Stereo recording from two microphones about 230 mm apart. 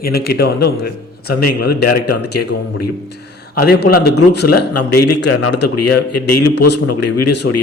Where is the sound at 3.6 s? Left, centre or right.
Left.